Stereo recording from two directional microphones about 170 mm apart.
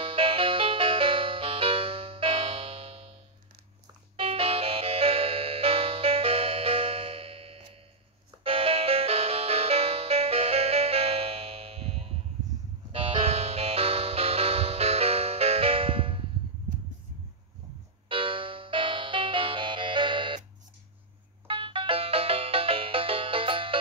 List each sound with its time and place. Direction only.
0.0 s music: 30° right (ahead or behind)
4.2 s music: 35° right (ahead or behind)
12.9 s music: 35° right (ahead or behind)
18.0 s music: 30° right (ahead or behind)
21.5 s music: 30° right (ahead or behind)